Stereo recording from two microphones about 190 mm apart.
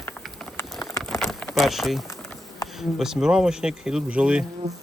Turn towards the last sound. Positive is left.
turn(degrees=-5)  # may be behind; listen again after turning